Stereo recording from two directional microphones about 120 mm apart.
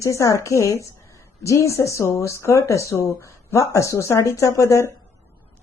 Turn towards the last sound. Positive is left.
turn(degrees=25)  # may be behind; listen again after turning